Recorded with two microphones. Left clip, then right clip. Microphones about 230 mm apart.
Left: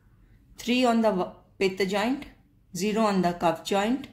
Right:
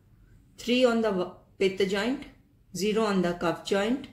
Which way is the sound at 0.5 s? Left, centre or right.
Left.